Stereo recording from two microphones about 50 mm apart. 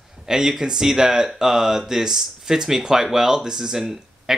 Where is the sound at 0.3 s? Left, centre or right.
Centre.